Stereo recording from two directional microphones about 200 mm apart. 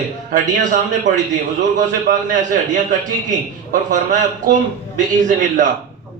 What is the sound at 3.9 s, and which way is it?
A man's voice, 40° right (ahead or behind).